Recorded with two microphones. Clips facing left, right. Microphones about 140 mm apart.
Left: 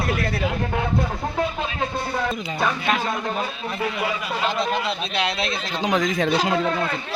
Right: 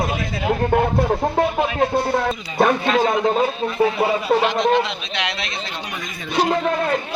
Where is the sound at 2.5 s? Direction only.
55° right (ahead or behind).